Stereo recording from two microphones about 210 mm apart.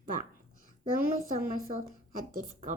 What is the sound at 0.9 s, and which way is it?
A woman's voice, 40° right (ahead or behind).